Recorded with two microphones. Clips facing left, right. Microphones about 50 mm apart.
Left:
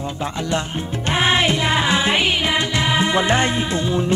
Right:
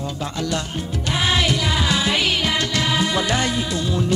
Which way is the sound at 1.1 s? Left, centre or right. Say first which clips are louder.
Left 3 dB; left.